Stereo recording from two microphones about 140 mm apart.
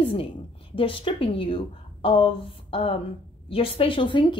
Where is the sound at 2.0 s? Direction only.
40° left (ahead or behind).